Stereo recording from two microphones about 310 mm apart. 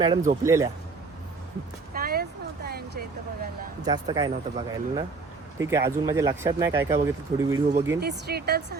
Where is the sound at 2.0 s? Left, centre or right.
Right.